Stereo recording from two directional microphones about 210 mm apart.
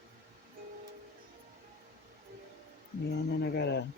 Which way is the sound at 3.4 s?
55° left (ahead or behind).